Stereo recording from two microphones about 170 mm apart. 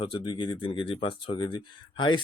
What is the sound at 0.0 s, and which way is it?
Speech, 30° left (ahead or behind).